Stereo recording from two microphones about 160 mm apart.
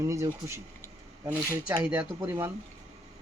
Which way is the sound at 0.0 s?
20° right (ahead or behind).